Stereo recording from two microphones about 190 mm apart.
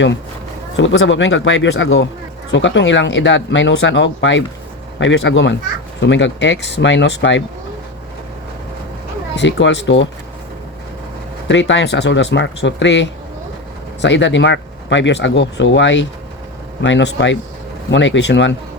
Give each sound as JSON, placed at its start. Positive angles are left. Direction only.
{"t": 0.8, "sound": "speech", "side_deg": 75}
{"t": 9.3, "sound": "speech", "side_deg": 65}
{"t": 11.4, "sound": "speech", "side_deg": 70}